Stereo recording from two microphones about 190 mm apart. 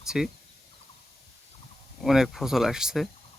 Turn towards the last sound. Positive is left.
turn(degrees=-5)  # may be behind; listen again after turning